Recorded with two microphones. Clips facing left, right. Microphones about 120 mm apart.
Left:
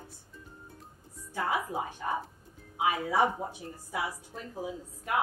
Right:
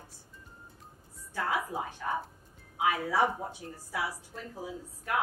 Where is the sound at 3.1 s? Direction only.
15° left (ahead or behind).